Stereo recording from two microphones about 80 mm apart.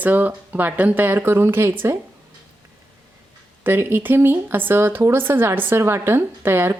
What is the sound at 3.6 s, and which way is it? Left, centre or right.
Speech, right.